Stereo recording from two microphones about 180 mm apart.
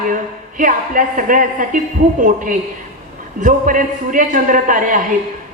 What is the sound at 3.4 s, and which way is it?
A woman's voice, 45° right (ahead or behind).